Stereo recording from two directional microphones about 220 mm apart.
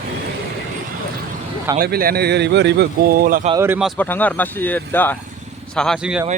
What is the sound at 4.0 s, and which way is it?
Speech, 10° left (ahead or behind).